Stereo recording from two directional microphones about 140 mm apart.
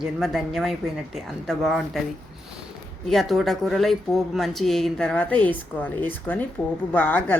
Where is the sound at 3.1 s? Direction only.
Centre (ahead or behind).